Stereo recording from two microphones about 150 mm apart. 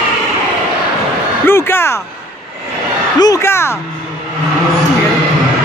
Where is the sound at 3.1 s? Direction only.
25° left (ahead or behind).